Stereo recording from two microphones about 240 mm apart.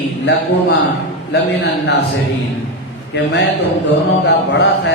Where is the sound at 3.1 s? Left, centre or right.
Left.